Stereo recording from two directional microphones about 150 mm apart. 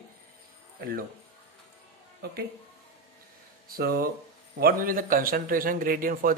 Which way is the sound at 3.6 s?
85° right.